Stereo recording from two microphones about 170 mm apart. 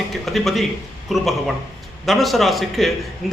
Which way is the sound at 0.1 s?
Centre (ahead or behind).